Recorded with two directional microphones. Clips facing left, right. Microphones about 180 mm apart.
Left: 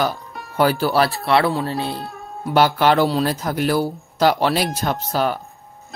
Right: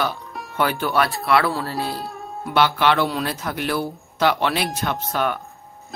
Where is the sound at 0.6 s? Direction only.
35° left (ahead or behind).